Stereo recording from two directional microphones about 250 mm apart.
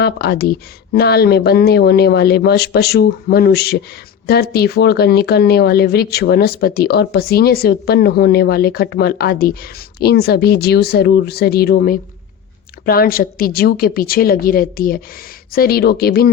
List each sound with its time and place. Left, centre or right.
0.0 s speech: left